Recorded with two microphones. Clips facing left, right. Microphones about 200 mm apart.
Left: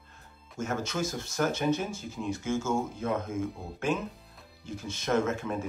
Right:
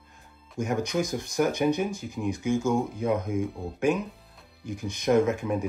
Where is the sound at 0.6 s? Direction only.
15° right (ahead or behind).